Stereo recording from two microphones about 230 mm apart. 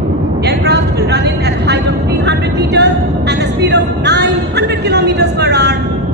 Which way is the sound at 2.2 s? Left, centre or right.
Right.